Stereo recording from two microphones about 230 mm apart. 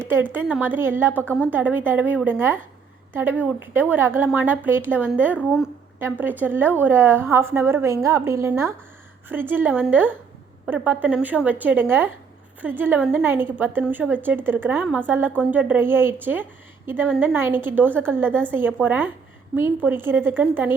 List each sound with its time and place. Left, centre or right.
0.1 s a woman's voice: centre
1.2 s a woman's voice: centre
1.5 s a woman's voice: centre